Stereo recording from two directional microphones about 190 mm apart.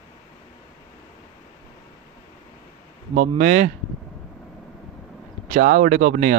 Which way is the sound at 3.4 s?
45° right (ahead or behind).